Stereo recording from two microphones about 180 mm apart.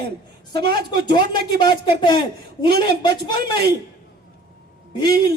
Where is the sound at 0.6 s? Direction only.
60° right (ahead or behind).